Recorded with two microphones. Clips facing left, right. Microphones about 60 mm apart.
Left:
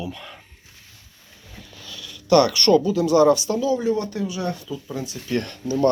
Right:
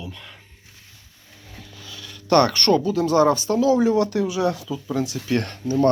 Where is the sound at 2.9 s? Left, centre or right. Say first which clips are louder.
Left 1 dB; right.